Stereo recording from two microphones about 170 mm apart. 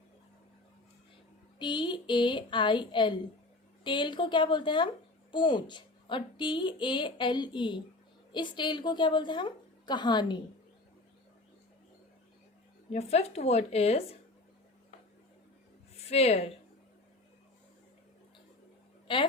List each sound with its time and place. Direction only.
1.5 s a woman's voice: 25° left (ahead or behind)
12.9 s a woman's voice: 40° left (ahead or behind)
16.0 s a woman's voice: 35° left (ahead or behind)
19.0 s a woman's voice: 30° left (ahead or behind)